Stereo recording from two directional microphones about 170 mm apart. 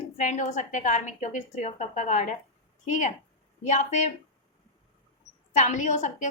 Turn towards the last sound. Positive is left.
turn(degrees=45)  # may be behind; listen again after turning